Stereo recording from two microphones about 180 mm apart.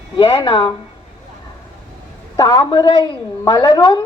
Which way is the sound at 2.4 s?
20° left (ahead or behind).